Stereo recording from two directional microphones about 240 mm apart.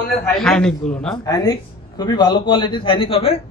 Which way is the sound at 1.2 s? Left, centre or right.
Centre.